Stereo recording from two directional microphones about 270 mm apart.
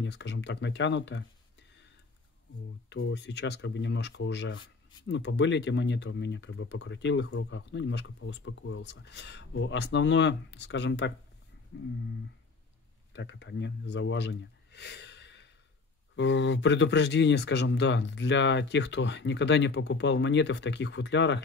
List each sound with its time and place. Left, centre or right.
0.0 s speech: left
2.9 s speech: left
11.7 s a sound: left
13.1 s speech: left